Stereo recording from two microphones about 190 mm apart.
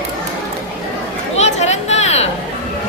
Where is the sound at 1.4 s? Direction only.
35° left (ahead or behind).